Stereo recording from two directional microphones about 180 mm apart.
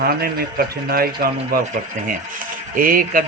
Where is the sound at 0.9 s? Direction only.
55° right (ahead or behind).